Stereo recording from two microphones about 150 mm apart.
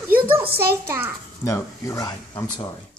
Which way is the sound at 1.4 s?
20° left (ahead or behind).